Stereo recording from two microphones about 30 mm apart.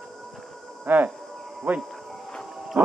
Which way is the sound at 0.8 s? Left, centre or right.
Right.